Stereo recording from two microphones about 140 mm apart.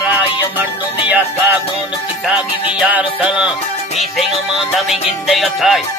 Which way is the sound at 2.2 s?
5° right (ahead or behind).